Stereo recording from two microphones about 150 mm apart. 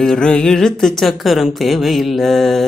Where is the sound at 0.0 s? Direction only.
5° left (ahead or behind).